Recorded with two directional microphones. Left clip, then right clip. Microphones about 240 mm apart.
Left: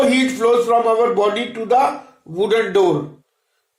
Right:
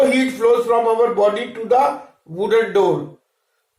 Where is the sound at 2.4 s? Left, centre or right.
Left.